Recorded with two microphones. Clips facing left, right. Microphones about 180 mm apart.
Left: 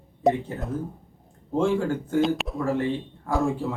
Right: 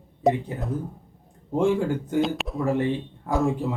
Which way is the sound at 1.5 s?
15° right (ahead or behind).